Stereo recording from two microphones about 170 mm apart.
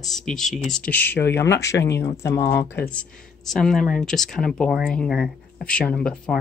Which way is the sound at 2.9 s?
5° left (ahead or behind).